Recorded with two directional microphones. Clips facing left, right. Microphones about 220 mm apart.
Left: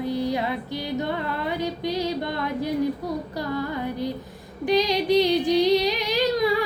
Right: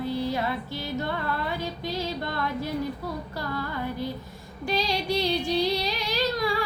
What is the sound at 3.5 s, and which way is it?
Music, 20° left (ahead or behind).